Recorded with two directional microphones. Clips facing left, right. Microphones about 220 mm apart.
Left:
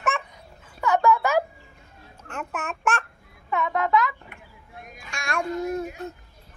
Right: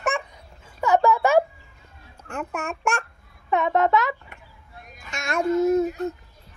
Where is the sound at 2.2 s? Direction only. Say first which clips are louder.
Right 3 dB; 10° right (ahead or behind).